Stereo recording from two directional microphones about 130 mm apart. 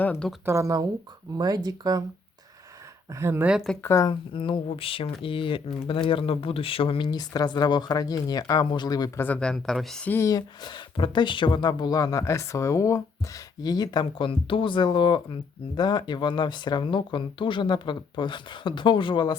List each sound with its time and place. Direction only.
0.0 s speech: 10° left (ahead or behind)
0.4 s speech: 25° right (ahead or behind)
3.1 s speech: 20° right (ahead or behind)
3.5 s speech: centre (ahead or behind)
3.8 s speech: 25° left (ahead or behind)
4.1 s speech: 40° left (ahead or behind)
9.1 s speech: 15° left (ahead or behind)
10.1 s speech: 25° left (ahead or behind)